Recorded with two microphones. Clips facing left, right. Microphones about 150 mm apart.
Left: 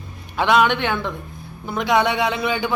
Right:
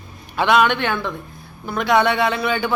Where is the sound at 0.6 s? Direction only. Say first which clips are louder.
Even; 15° left (ahead or behind).